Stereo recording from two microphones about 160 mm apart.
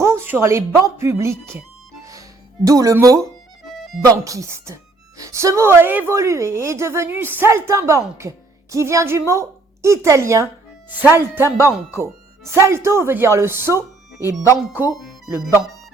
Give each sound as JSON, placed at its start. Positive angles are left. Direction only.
{"t": 0.0, "sound": "a sound", "side_deg": -15}
{"t": 0.8, "sound": "speech", "side_deg": -20}
{"t": 2.6, "sound": "speech", "side_deg": -20}
{"t": 3.6, "sound": "music", "side_deg": 0}
{"t": 4.0, "sound": "speech", "side_deg": -20}
{"t": 14.9, "sound": "music", "side_deg": 0}